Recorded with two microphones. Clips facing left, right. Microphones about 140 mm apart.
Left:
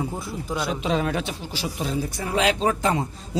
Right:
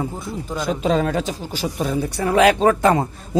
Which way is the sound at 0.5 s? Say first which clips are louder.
Right 3 dB; 5° left (ahead or behind).